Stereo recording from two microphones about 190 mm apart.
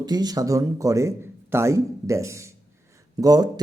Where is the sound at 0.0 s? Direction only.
20° right (ahead or behind).